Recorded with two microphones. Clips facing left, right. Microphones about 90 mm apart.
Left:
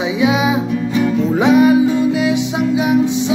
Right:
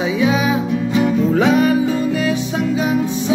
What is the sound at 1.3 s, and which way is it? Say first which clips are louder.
Music: left 5 dB; 15° left (ahead or behind).